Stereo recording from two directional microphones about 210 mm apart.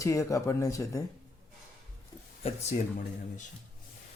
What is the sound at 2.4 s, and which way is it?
Speech, 35° left (ahead or behind).